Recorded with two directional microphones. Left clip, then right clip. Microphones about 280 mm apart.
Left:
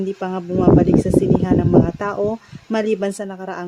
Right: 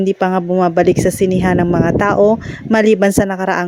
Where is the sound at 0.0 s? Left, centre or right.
Right.